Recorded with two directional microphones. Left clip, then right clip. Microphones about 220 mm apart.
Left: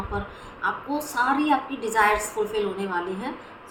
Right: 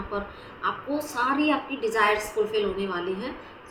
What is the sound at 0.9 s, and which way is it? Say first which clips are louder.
A woman's voice: left 3 dB; 15° left (ahead or behind).